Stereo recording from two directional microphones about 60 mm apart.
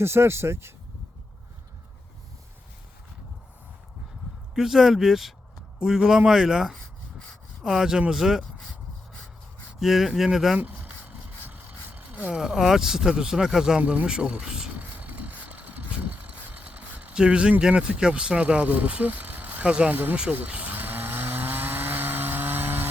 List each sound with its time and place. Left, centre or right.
0.0 s speech: right
4.5 s speech: centre
9.8 s speech: centre
10.6 s a sound: right
12.3 s speech: centre
14.7 s vehicle: right
17.2 s speech: centre
19.9 s speech: right
20.3 s chainsaw: right